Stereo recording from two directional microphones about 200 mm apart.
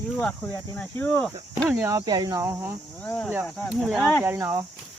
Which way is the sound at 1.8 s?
15° right (ahead or behind).